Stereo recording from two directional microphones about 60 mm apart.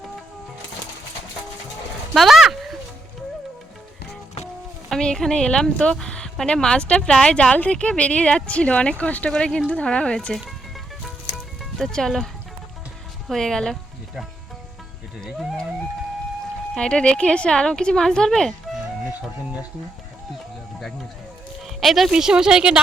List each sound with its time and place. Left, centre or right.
2.1 s a sound: centre
4.9 s speech: centre
9.3 s speech: centre
11.9 s speech: centre
16.7 s speech: centre
21.7 s speech: centre
22.1 s speech: centre